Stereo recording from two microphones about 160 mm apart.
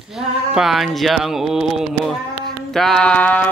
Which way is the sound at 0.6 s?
Centre (ahead or behind).